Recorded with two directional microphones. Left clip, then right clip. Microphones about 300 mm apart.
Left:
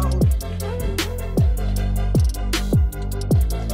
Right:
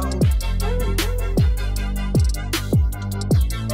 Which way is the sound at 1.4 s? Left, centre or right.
Centre.